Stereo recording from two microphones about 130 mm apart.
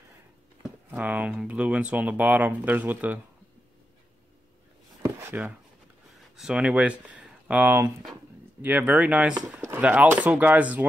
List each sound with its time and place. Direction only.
0.9 s speech: 10° right (ahead or behind)
5.0 s a sound: 15° right (ahead or behind)
6.3 s speech: 5° right (ahead or behind)